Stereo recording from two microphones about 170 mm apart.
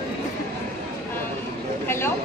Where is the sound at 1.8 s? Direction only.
15° left (ahead or behind).